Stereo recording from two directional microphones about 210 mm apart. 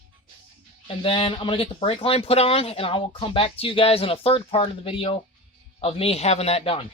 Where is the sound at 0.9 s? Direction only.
25° left (ahead or behind).